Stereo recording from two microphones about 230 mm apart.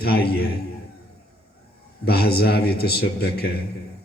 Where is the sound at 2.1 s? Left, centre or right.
Left.